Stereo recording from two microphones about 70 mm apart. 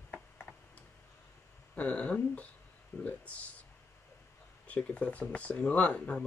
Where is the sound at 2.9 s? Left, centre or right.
Left.